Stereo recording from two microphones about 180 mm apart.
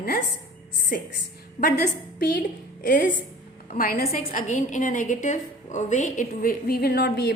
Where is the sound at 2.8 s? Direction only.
50° left (ahead or behind).